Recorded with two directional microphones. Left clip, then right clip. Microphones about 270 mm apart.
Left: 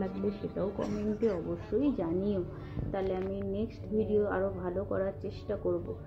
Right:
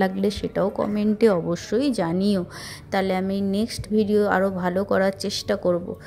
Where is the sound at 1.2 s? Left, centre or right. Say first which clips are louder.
Right 14 dB; right.